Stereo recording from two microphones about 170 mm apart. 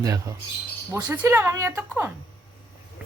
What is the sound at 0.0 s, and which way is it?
Speech, 20° right (ahead or behind).